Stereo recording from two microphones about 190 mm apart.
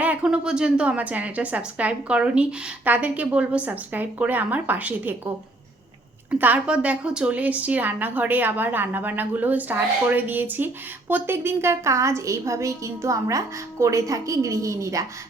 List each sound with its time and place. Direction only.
0.0 s a woman's voice: 5° right (ahead or behind)
6.4 s a woman's voice: 5° right (ahead or behind)